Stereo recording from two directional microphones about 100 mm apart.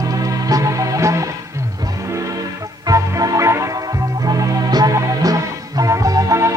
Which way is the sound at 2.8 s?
35° right (ahead or behind).